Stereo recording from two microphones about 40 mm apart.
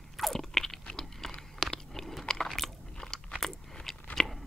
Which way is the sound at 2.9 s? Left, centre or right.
Centre.